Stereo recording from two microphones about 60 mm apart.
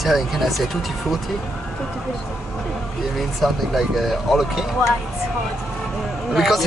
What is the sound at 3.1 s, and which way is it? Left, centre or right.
Speech, centre.